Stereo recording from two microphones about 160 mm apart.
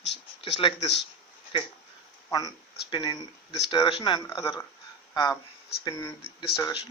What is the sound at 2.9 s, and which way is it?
Speech, 30° left (ahead or behind).